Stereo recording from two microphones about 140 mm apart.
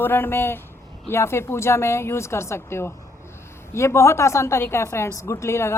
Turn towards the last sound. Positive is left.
turn(degrees=20)  # may be behind; listen again after turning